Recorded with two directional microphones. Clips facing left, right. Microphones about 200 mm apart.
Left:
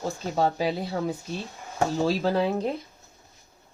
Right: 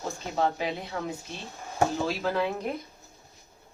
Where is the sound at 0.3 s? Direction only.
35° left (ahead or behind).